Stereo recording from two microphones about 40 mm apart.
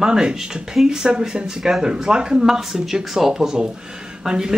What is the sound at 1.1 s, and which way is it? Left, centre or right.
A man's voice, right.